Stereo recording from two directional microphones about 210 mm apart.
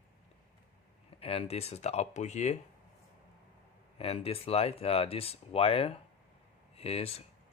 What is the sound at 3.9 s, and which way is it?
Speech, 30° left (ahead or behind).